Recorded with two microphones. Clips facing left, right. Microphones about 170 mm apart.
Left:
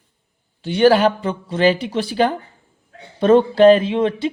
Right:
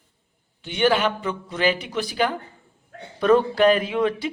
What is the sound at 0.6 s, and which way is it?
A man's voice, 35° left (ahead or behind).